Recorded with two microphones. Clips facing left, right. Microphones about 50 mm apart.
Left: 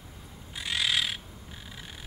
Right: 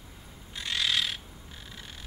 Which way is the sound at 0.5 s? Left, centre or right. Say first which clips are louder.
Left 1 dB; centre.